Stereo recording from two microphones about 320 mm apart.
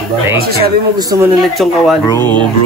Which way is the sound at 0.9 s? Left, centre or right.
Centre.